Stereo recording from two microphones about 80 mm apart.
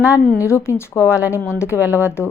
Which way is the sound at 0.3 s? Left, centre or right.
Left.